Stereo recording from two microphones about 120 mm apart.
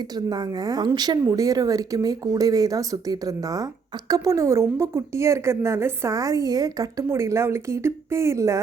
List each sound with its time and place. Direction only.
0.3 s a woman's voice: 35° right (ahead or behind)